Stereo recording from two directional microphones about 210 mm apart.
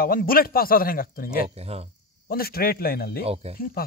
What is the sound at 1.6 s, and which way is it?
Speech, 30° right (ahead or behind).